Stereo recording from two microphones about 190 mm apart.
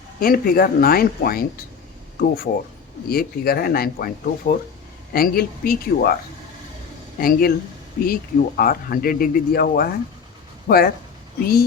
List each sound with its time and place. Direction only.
0.2 s speech: 50° left (ahead or behind)
7.2 s speech: 50° left (ahead or behind)
10.7 s speech: 65° left (ahead or behind)